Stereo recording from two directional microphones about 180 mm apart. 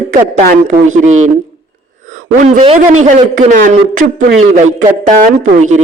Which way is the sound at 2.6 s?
35° right (ahead or behind).